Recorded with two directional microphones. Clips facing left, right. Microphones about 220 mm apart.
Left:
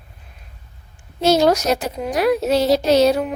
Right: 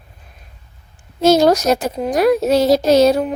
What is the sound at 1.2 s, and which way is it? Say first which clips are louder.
A woman's voice: right 3 dB; 45° right (ahead or behind).